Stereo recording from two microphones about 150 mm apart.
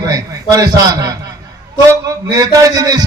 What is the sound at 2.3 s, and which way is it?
Speech, 25° right (ahead or behind).